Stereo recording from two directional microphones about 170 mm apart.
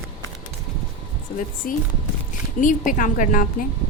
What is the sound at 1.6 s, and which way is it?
A woman's voice, 55° left (ahead or behind).